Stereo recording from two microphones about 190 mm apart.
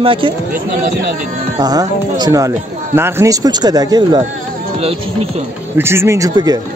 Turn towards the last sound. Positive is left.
turn(degrees=-20)  # may be behind; listen again after turning